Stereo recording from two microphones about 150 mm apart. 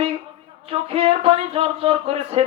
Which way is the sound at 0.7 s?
40° right (ahead or behind).